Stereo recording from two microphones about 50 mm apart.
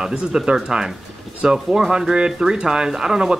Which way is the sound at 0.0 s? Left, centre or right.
Centre.